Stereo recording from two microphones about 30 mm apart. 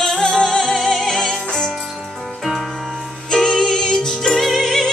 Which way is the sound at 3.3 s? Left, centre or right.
Left.